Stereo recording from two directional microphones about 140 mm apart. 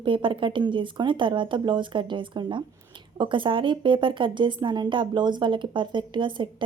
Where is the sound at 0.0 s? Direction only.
35° right (ahead or behind).